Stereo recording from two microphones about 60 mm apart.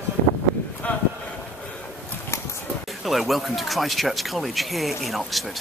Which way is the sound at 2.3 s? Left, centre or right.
Left.